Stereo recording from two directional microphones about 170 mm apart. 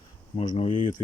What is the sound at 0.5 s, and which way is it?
Speech, 30° left (ahead or behind).